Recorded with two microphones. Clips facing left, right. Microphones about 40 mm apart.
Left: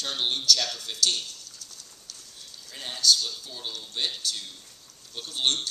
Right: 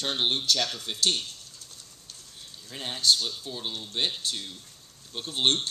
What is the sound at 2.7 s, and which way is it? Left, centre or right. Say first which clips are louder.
Speech: left 1 dB; right.